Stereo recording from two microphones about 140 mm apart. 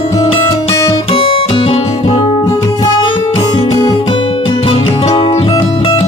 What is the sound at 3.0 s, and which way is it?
Music, 35° left (ahead or behind).